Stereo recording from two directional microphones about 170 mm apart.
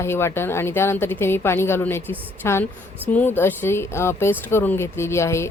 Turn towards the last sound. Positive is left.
turn(degrees=15)  # may be behind; listen again after turning